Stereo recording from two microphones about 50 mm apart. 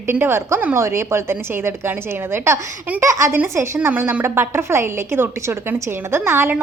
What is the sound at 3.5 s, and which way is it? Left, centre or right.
A woman's voice, right.